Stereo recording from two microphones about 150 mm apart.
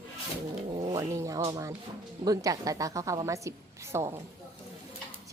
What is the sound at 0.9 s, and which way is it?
A woman's voice, 20° right (ahead or behind).